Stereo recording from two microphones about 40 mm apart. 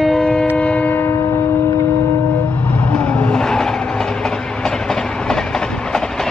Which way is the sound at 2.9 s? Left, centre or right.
Left.